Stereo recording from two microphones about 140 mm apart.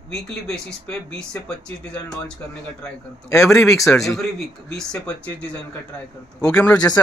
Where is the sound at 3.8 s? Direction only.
Centre (ahead or behind).